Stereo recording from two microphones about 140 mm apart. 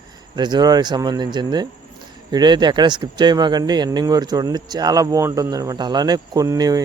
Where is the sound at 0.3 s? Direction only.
30° right (ahead or behind).